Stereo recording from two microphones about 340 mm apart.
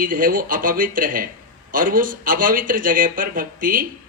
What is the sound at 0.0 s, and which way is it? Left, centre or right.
Speech, right.